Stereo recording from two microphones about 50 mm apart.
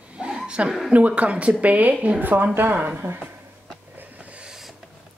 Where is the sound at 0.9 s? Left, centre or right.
Right.